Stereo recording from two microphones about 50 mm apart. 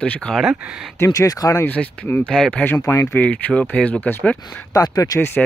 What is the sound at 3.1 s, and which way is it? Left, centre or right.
Speech, left.